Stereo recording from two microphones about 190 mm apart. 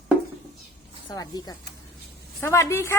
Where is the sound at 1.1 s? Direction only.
20° left (ahead or behind).